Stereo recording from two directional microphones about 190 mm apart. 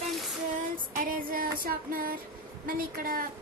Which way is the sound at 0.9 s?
50° right (ahead or behind).